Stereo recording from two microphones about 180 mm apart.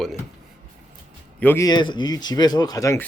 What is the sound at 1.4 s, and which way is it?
Speech, 10° left (ahead or behind).